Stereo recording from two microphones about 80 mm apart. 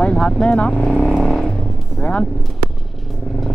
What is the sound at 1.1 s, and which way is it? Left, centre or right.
Vehicle, centre.